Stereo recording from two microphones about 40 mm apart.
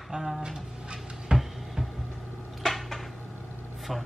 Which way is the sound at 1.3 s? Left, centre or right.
Right.